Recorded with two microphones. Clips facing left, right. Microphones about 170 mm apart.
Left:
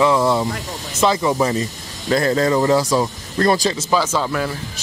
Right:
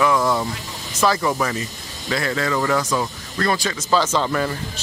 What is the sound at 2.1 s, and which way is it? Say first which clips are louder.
Speech: left 6 dB; 35° left (ahead or behind).